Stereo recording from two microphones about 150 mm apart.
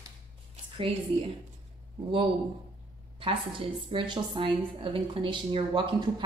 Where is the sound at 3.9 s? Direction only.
35° right (ahead or behind).